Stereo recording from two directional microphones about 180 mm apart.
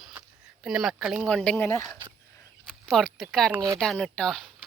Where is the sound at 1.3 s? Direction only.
5° left (ahead or behind).